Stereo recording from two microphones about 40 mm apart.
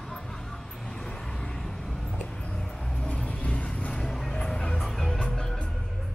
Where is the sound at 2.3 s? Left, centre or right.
Left.